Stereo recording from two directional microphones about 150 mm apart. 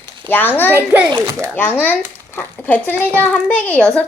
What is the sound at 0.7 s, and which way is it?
Speech, 15° right (ahead or behind).